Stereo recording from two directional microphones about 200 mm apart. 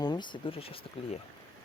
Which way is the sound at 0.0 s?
20° left (ahead or behind).